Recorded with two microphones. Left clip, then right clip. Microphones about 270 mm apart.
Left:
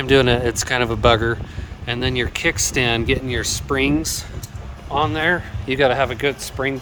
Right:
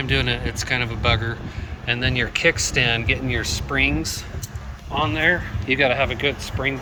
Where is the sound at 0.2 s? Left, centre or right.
Left.